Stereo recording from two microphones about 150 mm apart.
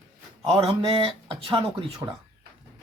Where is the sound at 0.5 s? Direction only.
40° right (ahead or behind).